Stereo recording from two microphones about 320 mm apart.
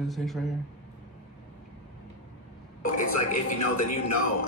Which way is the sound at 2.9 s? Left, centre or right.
Left.